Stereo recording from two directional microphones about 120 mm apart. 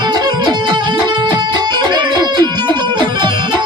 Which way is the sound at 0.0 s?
35° right (ahead or behind).